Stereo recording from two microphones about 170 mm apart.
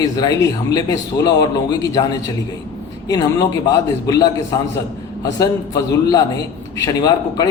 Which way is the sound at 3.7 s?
20° left (ahead or behind).